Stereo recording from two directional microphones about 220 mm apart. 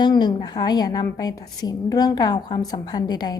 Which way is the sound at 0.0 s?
20° left (ahead or behind).